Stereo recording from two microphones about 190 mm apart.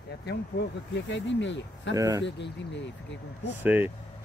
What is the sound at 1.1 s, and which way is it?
Speech, 70° left (ahead or behind).